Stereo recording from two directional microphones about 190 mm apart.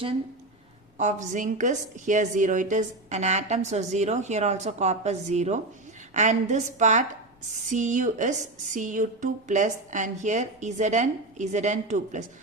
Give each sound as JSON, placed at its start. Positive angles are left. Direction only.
{"t": 0.9, "sound": "a woman's voice", "side_deg": -40}